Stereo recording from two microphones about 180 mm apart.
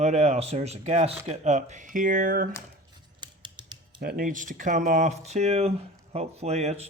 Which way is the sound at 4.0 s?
55° right (ahead or behind).